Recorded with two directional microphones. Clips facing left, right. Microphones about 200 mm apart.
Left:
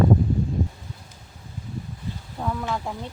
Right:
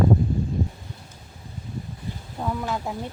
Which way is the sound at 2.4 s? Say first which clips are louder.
Even; 10° right (ahead or behind).